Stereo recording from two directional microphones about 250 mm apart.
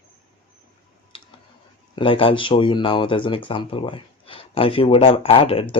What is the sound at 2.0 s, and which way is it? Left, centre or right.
Speech, left.